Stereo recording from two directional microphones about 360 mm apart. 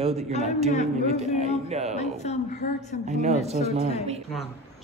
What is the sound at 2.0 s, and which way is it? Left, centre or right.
Speech, centre.